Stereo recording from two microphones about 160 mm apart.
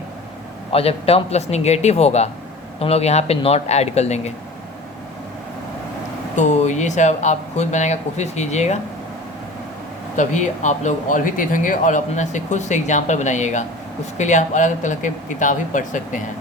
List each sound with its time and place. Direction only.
0.7 s speech: 40° left (ahead or behind)
6.3 s speech: 45° left (ahead or behind)
10.2 s speech: 50° left (ahead or behind)